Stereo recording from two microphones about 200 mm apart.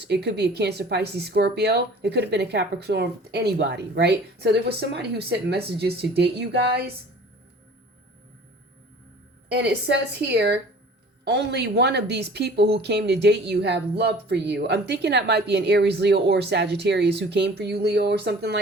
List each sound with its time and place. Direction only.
0.0 s a woman's voice: 55° right (ahead or behind)
9.5 s a woman's voice: 55° right (ahead or behind)